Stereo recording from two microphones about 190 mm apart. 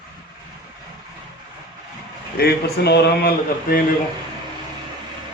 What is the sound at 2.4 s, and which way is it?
A man's voice, 55° left (ahead or behind).